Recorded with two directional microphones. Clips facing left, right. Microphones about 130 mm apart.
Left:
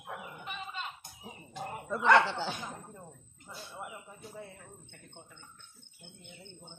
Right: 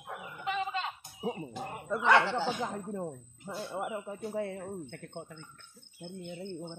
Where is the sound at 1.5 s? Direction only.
5° right (ahead or behind).